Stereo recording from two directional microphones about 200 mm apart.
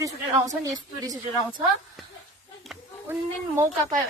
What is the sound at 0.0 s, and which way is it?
Speech, 15° right (ahead or behind).